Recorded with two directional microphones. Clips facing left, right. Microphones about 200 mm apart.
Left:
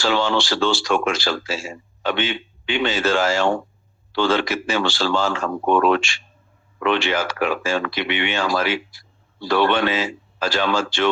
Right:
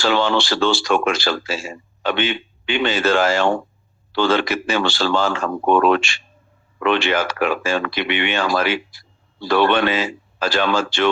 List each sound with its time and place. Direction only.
0.0 s speech: 60° right (ahead or behind)